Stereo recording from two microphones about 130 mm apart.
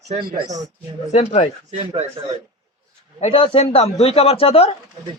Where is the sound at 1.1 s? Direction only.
55° left (ahead or behind).